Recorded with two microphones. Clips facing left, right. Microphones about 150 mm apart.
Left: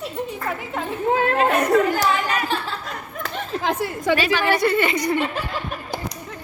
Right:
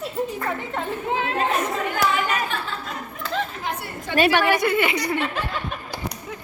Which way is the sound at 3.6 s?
90° left.